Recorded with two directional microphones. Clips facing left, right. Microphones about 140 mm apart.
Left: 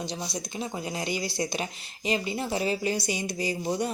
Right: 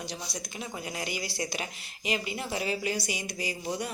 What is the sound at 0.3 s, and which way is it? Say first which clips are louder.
A woman's voice: left 5 dB; 25° left (ahead or behind).